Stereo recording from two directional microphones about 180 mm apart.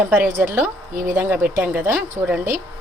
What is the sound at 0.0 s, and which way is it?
Speech, 10° right (ahead or behind).